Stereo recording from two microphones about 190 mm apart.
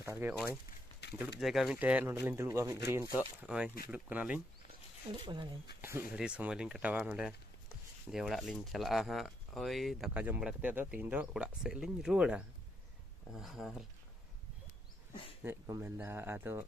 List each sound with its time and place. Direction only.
0.0 s speech: 10° right (ahead or behind)
1.0 s a sound: 65° left (ahead or behind)
1.4 s speech: centre (ahead or behind)
5.2 s speech: 25° right (ahead or behind)
5.8 s speech: 10° right (ahead or behind)
15.4 s speech: 15° right (ahead or behind)